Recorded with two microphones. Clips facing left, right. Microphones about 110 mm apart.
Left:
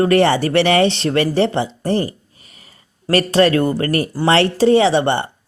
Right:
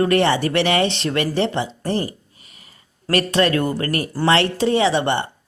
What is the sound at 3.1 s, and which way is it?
Speech, 35° left (ahead or behind).